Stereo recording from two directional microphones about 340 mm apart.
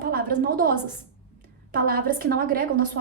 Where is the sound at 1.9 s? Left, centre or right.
Right.